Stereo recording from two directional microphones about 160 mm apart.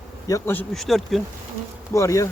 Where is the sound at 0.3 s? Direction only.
15° left (ahead or behind).